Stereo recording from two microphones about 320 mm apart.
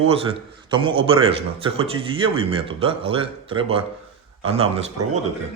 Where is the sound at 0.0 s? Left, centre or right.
Centre.